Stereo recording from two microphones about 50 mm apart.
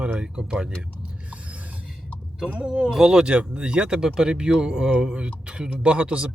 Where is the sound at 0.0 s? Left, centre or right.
Right.